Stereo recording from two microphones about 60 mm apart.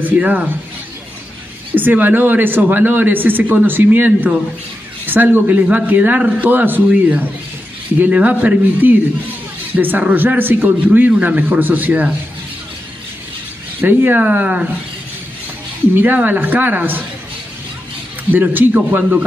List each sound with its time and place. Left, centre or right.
0.0 s a man's voice: right
1.8 s a man's voice: right
13.7 s a man's voice: right
15.9 s speech: right
18.3 s a man's voice: right